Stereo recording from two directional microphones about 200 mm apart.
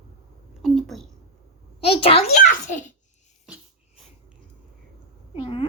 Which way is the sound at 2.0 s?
30° left (ahead or behind).